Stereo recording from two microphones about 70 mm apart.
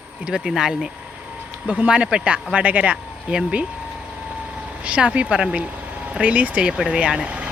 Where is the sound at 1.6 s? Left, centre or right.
Centre.